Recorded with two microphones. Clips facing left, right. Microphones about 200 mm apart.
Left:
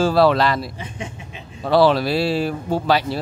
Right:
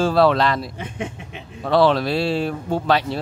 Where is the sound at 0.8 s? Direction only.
55° right (ahead or behind).